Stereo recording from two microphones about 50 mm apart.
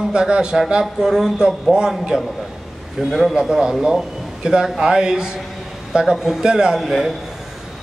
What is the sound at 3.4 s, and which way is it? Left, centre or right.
A man's voice, centre.